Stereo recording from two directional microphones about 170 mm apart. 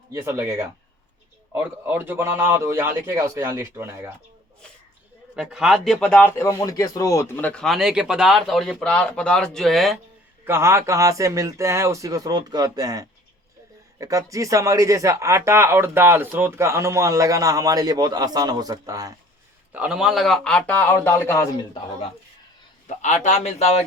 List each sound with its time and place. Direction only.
0.1 s a man's voice: 15° right (ahead or behind)
5.4 s speech: 5° right (ahead or behind)
10.4 s speech: 15° right (ahead or behind)
19.7 s speech: 5° right (ahead or behind); by 21.4 s 15° left (ahead or behind)
22.9 s a man's voice: 45° left (ahead or behind)